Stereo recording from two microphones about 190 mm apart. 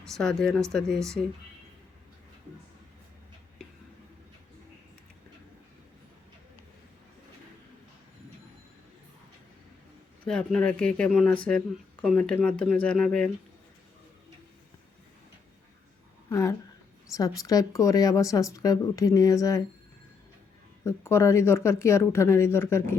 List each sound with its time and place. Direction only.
0.0 s speech: 5° left (ahead or behind)
10.2 s a woman's voice: 5° left (ahead or behind)
16.3 s a woman's voice: 15° left (ahead or behind)
20.8 s a woman's voice: 15° left (ahead or behind)